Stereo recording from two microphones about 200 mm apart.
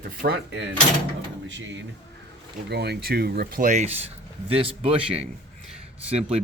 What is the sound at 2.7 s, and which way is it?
Speech, 55° right (ahead or behind).